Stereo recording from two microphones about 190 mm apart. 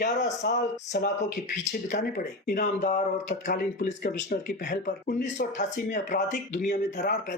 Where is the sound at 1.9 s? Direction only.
40° left (ahead or behind).